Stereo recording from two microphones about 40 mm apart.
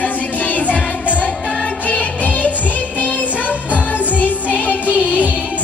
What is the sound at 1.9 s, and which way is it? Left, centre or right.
Music, left.